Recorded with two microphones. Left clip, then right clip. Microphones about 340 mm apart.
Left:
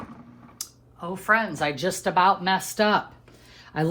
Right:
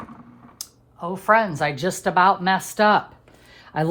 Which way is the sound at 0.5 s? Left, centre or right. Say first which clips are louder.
Right 2 dB; centre.